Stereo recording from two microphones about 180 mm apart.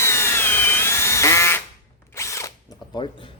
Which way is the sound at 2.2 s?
15° left (ahead or behind).